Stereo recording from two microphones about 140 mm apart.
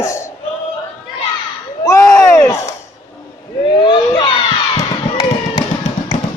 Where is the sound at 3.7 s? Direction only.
35° left (ahead or behind).